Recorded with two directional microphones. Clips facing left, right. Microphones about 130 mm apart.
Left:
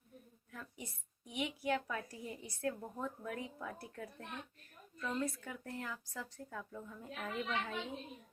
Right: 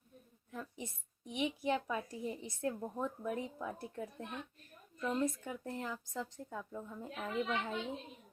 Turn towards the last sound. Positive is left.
turn(degrees=-20)  # may be behind; listen again after turning